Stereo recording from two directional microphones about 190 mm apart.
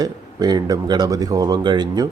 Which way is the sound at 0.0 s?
20° right (ahead or behind).